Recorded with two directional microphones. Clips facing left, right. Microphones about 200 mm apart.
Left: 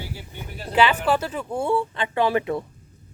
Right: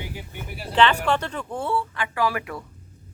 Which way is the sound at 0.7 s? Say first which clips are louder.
Left 1 dB; 5° left (ahead or behind).